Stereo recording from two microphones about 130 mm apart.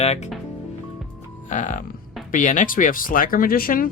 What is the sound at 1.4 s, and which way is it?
Speech, 80° left.